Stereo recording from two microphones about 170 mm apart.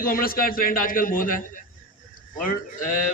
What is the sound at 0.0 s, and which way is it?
A man's voice, 60° left (ahead or behind).